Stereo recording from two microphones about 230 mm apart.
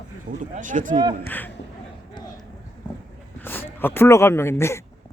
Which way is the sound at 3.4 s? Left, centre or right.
Centre.